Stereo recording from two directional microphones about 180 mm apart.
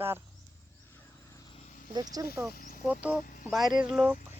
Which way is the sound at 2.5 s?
50° left (ahead or behind).